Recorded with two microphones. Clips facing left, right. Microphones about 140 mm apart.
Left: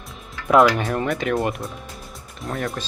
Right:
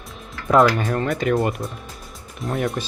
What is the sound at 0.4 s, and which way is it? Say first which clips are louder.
Speech: even; centre (ahead or behind).